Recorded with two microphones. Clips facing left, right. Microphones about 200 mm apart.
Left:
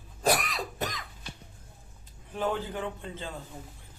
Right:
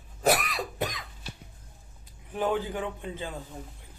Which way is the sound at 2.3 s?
15° right (ahead or behind).